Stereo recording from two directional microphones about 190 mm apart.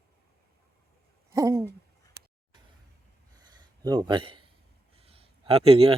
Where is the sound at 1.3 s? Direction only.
15° right (ahead or behind).